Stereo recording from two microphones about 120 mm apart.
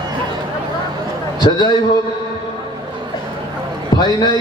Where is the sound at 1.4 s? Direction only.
35° left (ahead or behind).